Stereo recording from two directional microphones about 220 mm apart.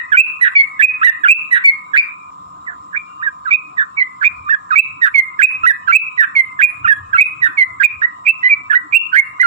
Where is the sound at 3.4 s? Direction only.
25° right (ahead or behind).